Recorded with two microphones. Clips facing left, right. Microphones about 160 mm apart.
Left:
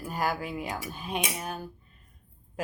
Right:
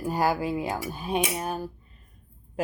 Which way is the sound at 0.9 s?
40° right (ahead or behind).